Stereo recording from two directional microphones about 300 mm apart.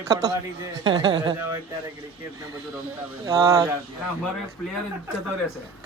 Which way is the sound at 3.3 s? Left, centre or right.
Centre.